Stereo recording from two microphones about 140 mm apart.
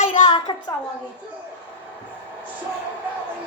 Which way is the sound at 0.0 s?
60° left (ahead or behind).